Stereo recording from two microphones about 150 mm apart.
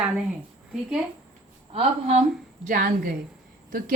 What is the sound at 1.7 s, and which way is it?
Speech, 45° right (ahead or behind).